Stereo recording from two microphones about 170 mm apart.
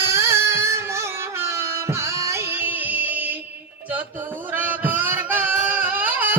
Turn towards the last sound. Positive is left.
turn(degrees=-10)  # may be behind; listen again after turning